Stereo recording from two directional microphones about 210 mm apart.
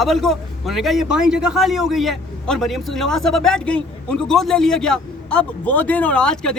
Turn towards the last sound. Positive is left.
turn(degrees=5)  # may be behind; listen again after turning